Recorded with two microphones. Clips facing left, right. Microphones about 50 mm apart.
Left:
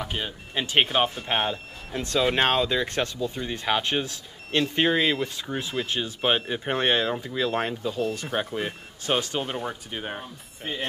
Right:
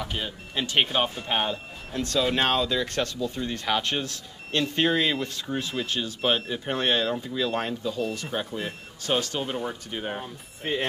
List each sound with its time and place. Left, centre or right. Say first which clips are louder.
0.0 s speech: left 1 dB; centre
5.9 s speech: left 1 dB; left